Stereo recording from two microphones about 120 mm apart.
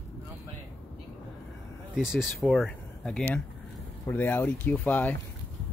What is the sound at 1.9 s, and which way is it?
Speech, 5° right (ahead or behind).